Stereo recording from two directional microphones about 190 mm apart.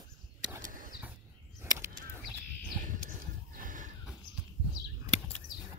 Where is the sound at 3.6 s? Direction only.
45° right (ahead or behind).